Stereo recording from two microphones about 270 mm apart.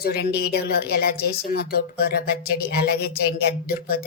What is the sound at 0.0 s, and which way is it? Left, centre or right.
A woman's voice, left.